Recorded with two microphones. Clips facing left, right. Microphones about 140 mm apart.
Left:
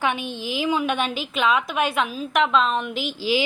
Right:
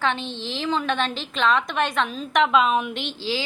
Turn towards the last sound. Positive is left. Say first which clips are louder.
# left 4 dB
turn(degrees=10)  # may be behind; listen again after turning